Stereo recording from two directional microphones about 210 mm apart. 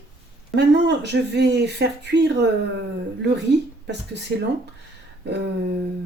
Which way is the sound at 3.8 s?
55° right (ahead or behind).